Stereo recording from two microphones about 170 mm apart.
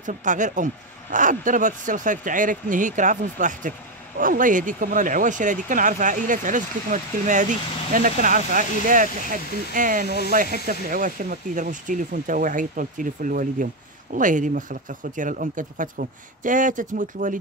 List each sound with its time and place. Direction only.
0.0 s speech: 50° right (ahead or behind)